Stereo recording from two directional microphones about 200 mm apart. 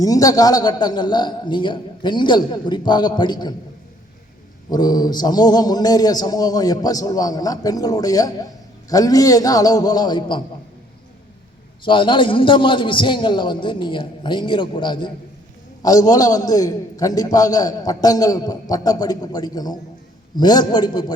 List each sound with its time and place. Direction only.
0.0 s a man's voice: 15° left (ahead or behind)
4.7 s a man's voice: 20° left (ahead or behind)
11.9 s a man's voice: 25° left (ahead or behind)